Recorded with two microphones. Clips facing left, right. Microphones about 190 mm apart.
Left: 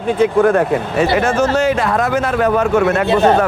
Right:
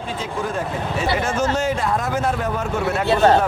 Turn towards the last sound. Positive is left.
turn(degrees=65)  # may be behind; listen again after turning